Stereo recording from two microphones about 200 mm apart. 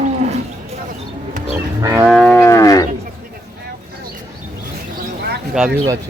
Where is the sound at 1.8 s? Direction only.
15° right (ahead or behind).